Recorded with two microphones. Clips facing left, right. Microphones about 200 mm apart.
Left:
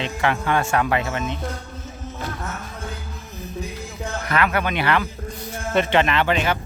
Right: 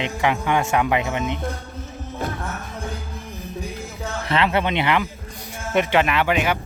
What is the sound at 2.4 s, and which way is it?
Music, 15° right (ahead or behind).